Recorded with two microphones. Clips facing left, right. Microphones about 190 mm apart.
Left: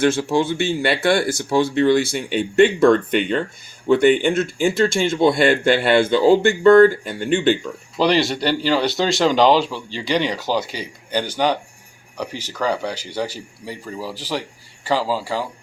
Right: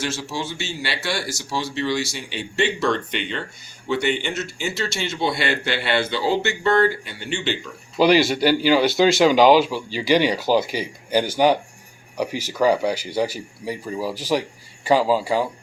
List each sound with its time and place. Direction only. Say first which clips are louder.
0.0 s speech: left 10 dB; 55° left (ahead or behind)
7.9 s speech: right 2 dB; 5° right (ahead or behind)